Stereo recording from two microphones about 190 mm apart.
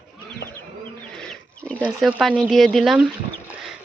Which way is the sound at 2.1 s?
5° right (ahead or behind).